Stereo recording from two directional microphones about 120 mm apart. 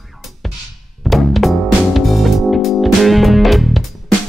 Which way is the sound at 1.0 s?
Centre (ahead or behind).